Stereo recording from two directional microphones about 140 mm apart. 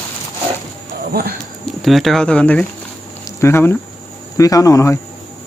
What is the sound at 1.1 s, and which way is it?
Speech, 90° right.